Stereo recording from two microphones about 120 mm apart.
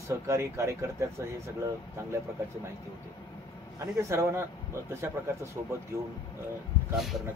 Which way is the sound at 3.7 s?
25° right (ahead or behind).